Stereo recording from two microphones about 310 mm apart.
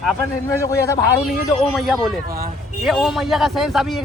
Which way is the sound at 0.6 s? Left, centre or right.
Centre.